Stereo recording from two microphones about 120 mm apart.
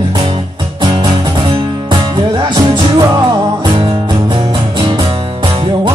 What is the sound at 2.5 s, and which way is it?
Music, 40° right (ahead or behind).